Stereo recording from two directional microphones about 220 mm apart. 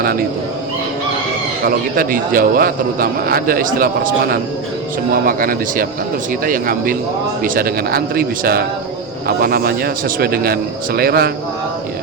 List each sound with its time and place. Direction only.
0.0 s speech: 45° right (ahead or behind)
1.6 s a man's voice: 40° right (ahead or behind)